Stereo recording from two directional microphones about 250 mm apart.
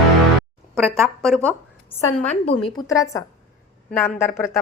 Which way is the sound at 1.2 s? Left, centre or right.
Centre.